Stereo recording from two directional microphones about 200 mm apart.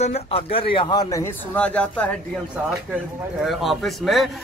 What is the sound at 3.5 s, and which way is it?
Speech, centre (ahead or behind).